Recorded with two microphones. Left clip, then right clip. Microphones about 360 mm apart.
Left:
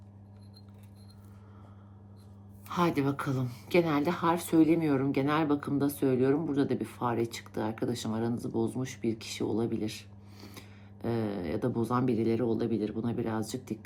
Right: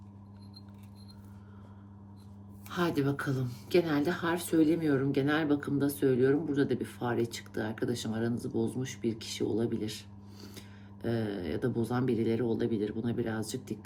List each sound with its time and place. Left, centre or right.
2.7 s speech: centre
11.0 s speech: centre